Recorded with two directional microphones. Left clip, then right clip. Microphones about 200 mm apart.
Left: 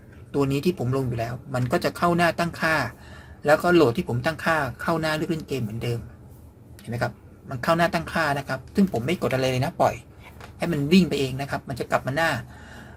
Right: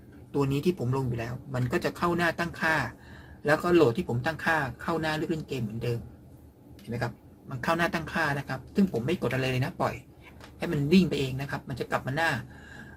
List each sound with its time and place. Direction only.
0.3 s speech: 25° left (ahead or behind)
7.0 s speech: 25° left (ahead or behind)